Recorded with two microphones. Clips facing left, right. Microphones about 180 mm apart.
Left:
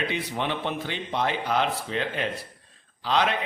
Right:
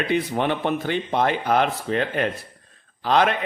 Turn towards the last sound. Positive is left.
turn(degrees=-50)  # may be behind; listen again after turning